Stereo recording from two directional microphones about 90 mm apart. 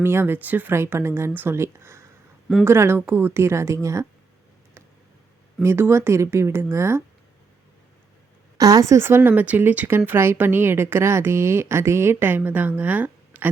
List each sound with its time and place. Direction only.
0.0 s speech: 25° right (ahead or behind)
5.6 s speech: 30° right (ahead or behind)
8.5 s speech: 40° right (ahead or behind); by 13.5 s 20° right (ahead or behind)